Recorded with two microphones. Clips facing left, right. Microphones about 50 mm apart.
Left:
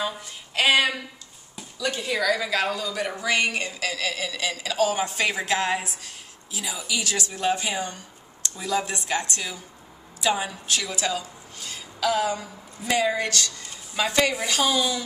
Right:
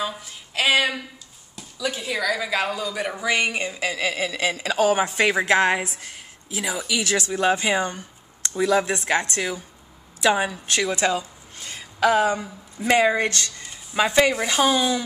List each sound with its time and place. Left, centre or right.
0.0 s a woman's voice: centre